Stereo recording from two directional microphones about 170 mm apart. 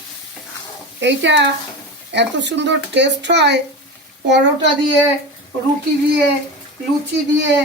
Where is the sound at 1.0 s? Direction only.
90° right.